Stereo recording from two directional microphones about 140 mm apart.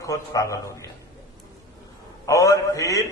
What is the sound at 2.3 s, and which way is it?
Speech, 20° left (ahead or behind).